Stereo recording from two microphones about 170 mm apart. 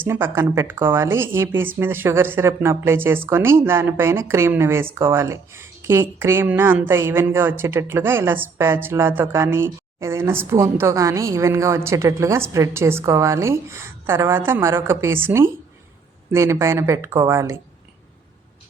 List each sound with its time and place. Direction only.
0.0 s speech: 15° right (ahead or behind)